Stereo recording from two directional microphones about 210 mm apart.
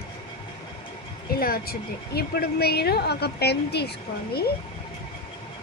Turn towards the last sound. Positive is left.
turn(degrees=50)  # may be behind; listen again after turning